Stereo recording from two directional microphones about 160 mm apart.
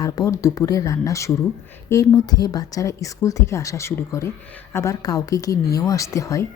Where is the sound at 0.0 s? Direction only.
20° left (ahead or behind).